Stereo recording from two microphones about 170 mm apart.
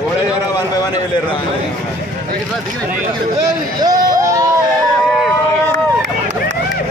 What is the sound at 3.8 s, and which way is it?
Hubbub, 20° right (ahead or behind).